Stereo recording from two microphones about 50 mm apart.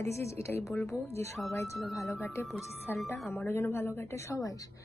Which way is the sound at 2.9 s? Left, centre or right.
Left.